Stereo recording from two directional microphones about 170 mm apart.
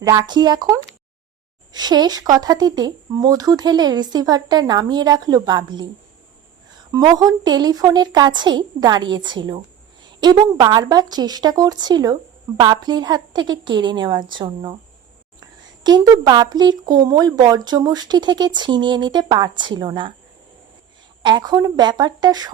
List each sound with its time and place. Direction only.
0.0 s speech: 25° right (ahead or behind)
6.9 s speech: 25° right (ahead or behind)
15.8 s speech: 25° right (ahead or behind)
21.2 s speech: 25° right (ahead or behind)